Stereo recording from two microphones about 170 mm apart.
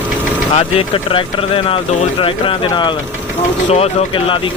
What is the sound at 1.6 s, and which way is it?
Speech, 30° left (ahead or behind).